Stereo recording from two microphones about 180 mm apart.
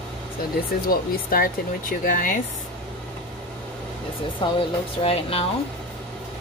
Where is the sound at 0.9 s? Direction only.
55° left (ahead or behind).